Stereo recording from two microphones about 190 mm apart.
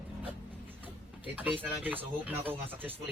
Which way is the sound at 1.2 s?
10° right (ahead or behind).